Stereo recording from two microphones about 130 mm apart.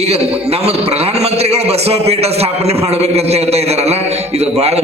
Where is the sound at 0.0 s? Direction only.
55° right (ahead or behind).